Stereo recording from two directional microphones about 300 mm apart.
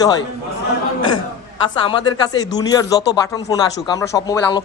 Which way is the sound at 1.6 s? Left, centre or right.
Centre.